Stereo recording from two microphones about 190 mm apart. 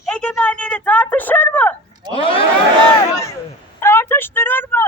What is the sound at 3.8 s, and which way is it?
Speech, 15° left (ahead or behind).